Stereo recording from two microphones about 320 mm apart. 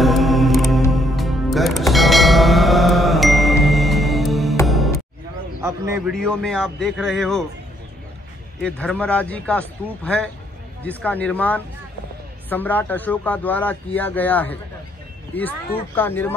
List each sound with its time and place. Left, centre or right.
0.0 s music: centre
5.6 s a man's voice: centre
8.6 s a man's voice: centre